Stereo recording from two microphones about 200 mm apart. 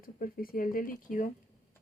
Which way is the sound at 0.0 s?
45° left (ahead or behind).